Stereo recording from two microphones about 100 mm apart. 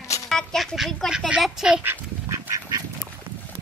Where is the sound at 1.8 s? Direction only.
20° right (ahead or behind).